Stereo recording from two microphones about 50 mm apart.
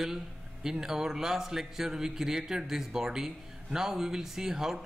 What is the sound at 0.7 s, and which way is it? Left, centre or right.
A man's voice, centre.